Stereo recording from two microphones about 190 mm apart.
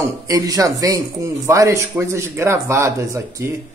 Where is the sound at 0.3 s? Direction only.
20° right (ahead or behind).